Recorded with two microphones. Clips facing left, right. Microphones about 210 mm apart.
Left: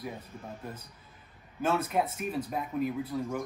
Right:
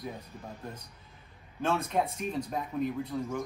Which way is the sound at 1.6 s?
5° left (ahead or behind).